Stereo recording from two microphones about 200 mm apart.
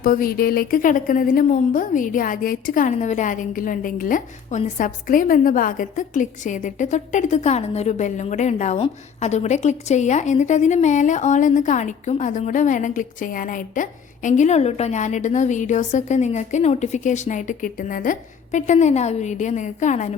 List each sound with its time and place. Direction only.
0.0 s a woman's voice: 45° left (ahead or behind)